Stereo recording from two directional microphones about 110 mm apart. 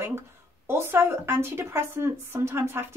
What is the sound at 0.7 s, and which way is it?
Speech, 20° right (ahead or behind).